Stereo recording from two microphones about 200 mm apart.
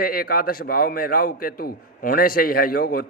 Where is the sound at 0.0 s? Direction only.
45° left (ahead or behind).